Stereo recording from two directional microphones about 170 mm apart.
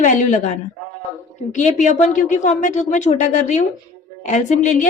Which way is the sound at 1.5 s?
45° left (ahead or behind).